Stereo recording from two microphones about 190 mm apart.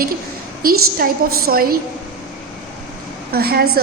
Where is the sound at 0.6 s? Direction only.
50° right (ahead or behind).